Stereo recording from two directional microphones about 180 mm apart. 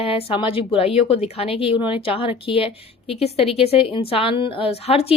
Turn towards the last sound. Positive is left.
turn(degrees=35)  # may be behind; listen again after turning